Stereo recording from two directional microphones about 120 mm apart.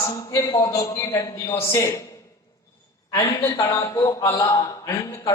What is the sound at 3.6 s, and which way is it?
A man's voice, 25° left (ahead or behind).